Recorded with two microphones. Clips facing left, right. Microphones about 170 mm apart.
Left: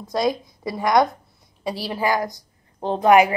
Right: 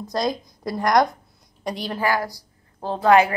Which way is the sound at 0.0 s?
Centre (ahead or behind).